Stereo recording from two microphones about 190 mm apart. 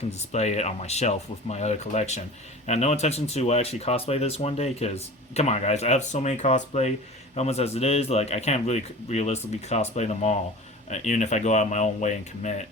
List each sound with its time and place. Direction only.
0.1 s speech: 35° left (ahead or behind)